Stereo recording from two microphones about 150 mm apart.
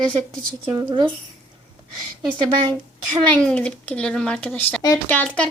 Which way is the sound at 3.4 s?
5° left (ahead or behind).